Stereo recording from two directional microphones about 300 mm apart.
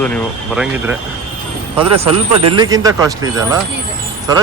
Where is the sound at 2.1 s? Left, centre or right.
Right.